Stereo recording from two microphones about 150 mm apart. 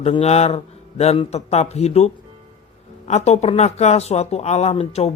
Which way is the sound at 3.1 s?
45° left (ahead or behind).